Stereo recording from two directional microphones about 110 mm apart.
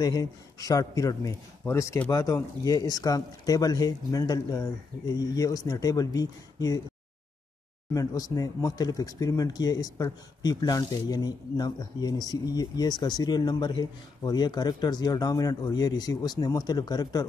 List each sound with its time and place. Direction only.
0.0 s speech: 35° left (ahead or behind)
7.9 s speech: 30° left (ahead or behind)